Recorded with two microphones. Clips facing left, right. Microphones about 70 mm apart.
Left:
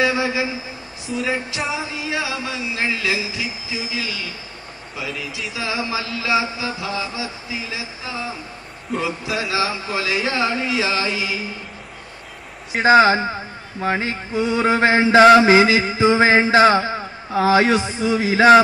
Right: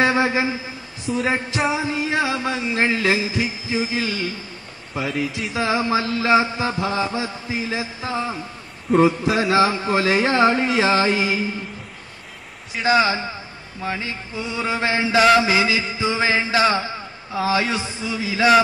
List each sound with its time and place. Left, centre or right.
0.0 s a sound: right
1.8 s a man's voice: right
4.9 s a man's voice: right
12.8 s a man's voice: left